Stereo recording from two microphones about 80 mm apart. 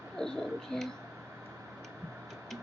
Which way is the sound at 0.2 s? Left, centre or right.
Centre.